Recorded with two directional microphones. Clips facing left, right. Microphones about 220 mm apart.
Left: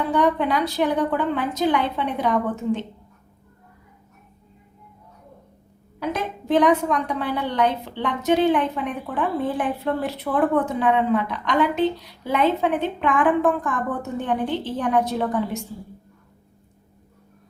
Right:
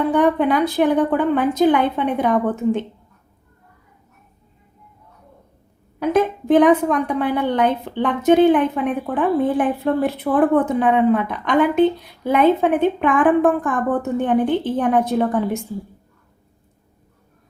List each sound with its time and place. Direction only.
0.1 s a woman's voice: 55° right (ahead or behind)
6.0 s a woman's voice: 50° right (ahead or behind)